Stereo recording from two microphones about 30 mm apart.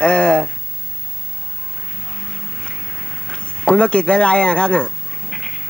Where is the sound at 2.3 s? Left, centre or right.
Left.